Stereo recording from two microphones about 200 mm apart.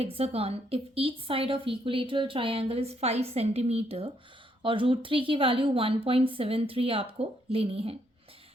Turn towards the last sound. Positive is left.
turn(degrees=-30)  # may be behind; listen again after turning